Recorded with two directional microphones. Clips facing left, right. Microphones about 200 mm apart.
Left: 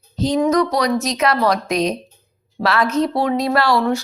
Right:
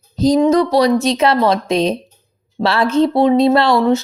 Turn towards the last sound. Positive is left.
turn(degrees=-20)  # may be behind; listen again after turning